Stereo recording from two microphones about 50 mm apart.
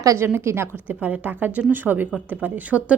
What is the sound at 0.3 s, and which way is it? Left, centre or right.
Speech, right.